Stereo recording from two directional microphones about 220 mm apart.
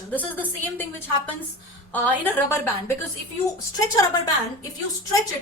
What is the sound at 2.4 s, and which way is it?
A woman's voice, 10° left (ahead or behind).